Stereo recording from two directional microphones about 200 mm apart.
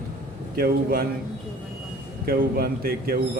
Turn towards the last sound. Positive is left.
turn(degrees=-50)  # may be behind; listen again after turning